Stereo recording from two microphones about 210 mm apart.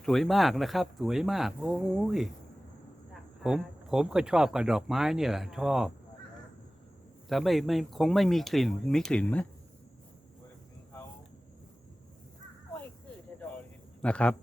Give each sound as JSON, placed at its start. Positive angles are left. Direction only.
{"t": 0.0, "sound": "speech", "side_deg": 0}
{"t": 3.4, "sound": "speech", "side_deg": -5}
{"t": 7.3, "sound": "speech", "side_deg": 0}
{"t": 14.0, "sound": "speech", "side_deg": 5}